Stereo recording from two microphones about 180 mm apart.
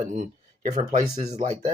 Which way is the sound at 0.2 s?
45° right (ahead or behind).